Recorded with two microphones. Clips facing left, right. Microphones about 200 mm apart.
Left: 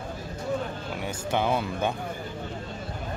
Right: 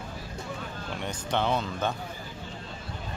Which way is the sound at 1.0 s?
10° left (ahead or behind).